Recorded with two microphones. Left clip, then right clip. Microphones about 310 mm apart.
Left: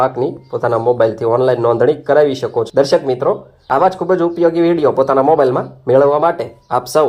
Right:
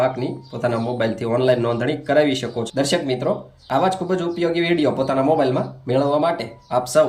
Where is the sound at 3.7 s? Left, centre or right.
Left.